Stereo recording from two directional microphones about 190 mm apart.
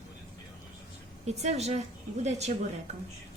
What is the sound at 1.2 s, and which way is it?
A woman's voice, 35° right (ahead or behind).